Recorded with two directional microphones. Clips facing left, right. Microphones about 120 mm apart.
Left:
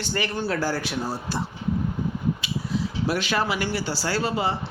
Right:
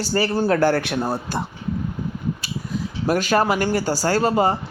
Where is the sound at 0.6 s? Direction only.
60° right (ahead or behind); by 4.6 s 45° right (ahead or behind).